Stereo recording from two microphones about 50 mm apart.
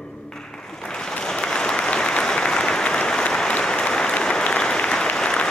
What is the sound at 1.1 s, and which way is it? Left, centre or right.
Applause, centre.